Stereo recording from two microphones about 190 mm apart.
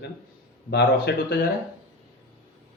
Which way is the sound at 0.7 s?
60° left (ahead or behind).